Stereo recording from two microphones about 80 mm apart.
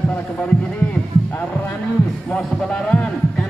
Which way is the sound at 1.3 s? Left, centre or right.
Centre.